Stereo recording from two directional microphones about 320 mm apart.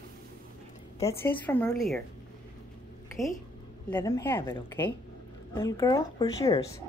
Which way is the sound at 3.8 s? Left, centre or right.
Centre.